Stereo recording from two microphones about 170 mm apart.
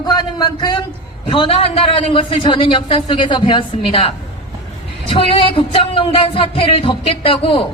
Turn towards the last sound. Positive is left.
turn(degrees=30)  # may be behind; listen again after turning